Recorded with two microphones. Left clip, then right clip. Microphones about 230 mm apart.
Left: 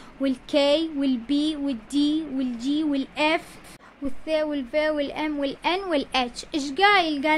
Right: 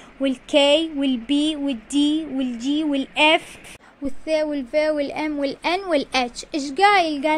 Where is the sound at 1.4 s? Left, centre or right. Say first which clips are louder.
Right 3 dB; centre.